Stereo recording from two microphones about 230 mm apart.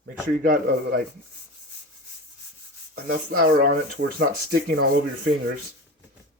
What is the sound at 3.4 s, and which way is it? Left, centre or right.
Speech, right.